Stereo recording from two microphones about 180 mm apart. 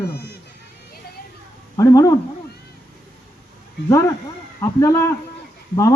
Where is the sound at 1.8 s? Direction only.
20° left (ahead or behind).